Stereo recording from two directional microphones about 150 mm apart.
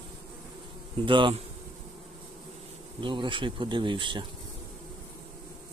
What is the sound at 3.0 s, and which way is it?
Speech, 30° right (ahead or behind).